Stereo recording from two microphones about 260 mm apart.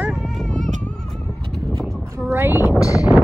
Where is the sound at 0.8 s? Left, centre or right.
Centre.